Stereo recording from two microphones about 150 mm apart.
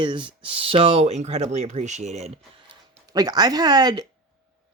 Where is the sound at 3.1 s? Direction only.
25° right (ahead or behind).